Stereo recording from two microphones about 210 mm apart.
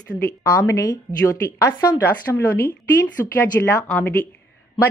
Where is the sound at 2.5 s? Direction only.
45° left (ahead or behind).